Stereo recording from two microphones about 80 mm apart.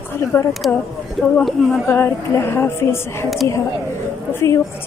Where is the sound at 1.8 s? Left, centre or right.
Left.